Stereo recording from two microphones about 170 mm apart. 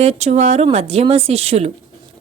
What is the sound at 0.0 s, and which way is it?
Speech, 40° right (ahead or behind).